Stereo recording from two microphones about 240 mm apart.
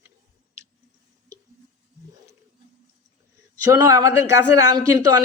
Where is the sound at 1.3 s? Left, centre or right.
Centre.